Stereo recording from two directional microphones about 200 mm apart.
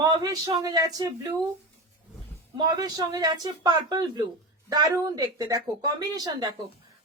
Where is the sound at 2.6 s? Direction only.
20° right (ahead or behind).